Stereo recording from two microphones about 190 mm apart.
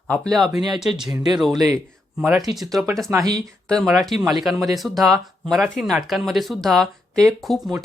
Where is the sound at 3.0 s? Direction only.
15° right (ahead or behind).